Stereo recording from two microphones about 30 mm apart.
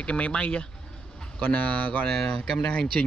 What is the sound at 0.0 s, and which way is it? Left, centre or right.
Speech, left.